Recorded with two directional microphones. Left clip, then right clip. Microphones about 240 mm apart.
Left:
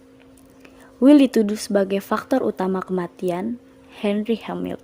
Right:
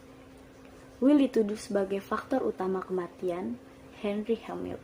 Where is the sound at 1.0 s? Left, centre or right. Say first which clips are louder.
Left 10 dB; left.